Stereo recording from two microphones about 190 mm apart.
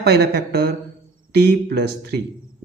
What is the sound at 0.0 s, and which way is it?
Speech, 60° right (ahead or behind).